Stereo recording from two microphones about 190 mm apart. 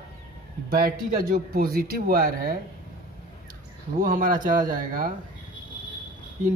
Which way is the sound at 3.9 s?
45° right (ahead or behind).